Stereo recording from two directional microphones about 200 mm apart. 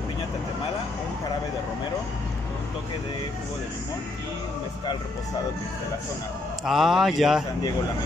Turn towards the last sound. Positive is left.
turn(degrees=0)  # may be behind; listen again after turning